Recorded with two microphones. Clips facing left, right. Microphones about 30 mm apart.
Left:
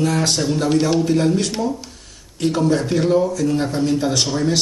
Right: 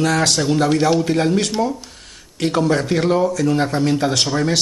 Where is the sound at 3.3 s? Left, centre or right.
Right.